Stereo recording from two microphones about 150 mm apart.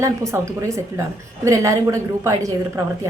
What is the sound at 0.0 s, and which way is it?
A woman's voice, 20° right (ahead or behind).